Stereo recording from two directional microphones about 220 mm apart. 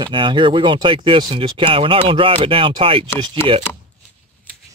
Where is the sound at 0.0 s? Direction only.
20° right (ahead or behind).